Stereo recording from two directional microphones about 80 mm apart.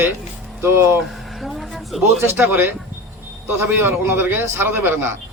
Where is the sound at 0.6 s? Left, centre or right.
Right.